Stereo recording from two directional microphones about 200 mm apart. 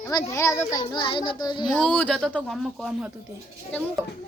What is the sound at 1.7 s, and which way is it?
Speech, 5° left (ahead or behind).